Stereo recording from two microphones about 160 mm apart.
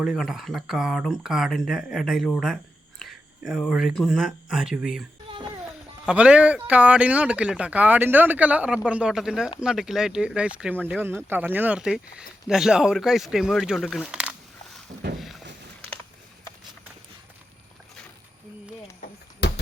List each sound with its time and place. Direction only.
0.0 s speech: 5° right (ahead or behind)
3.0 s a sound: centre (ahead or behind)
3.7 s speech: 5° right (ahead or behind)
6.1 s speech: 5° right (ahead or behind)
15.2 s boat: centre (ahead or behind)
18.9 s a sound: 90° left